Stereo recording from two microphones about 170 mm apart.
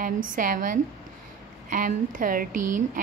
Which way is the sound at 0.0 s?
50° right (ahead or behind).